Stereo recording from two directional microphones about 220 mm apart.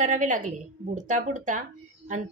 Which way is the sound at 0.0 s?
35° right (ahead or behind).